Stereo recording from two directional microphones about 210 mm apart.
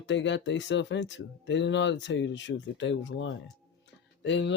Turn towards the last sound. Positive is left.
turn(degrees=60)  # may be behind; listen again after turning